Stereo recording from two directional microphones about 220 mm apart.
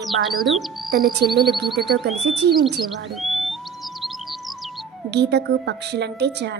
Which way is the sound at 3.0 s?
Centre (ahead or behind).